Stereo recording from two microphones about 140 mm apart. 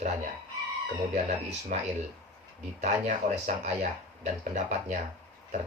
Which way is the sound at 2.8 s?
60° right (ahead or behind).